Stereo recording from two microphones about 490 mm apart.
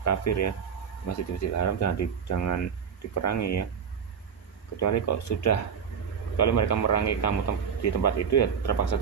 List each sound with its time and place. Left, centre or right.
0.0 s speech: left
4.7 s speech: left